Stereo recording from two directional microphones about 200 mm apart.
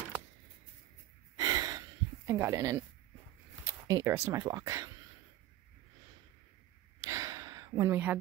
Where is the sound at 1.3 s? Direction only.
20° right (ahead or behind).